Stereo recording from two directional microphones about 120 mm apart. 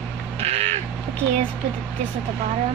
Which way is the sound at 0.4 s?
60° right (ahead or behind).